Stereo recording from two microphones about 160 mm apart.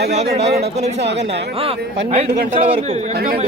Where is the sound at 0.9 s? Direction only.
90° right.